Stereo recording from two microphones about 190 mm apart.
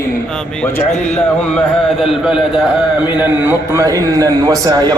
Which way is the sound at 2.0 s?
Centre (ahead or behind).